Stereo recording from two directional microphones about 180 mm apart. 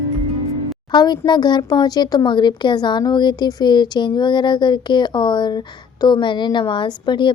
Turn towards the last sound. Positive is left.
turn(degrees=25)  # may be behind; listen again after turning